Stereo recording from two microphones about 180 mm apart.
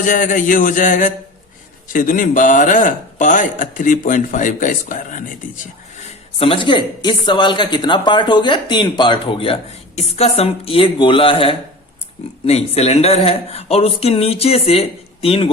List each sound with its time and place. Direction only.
0.0 s speech: 45° left (ahead or behind)
6.0 s speech: 30° left (ahead or behind)